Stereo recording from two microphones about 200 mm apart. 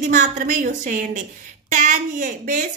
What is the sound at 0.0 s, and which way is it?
A woman's voice, 40° right (ahead or behind).